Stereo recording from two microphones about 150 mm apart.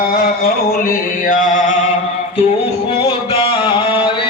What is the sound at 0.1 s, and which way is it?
Music, 80° left.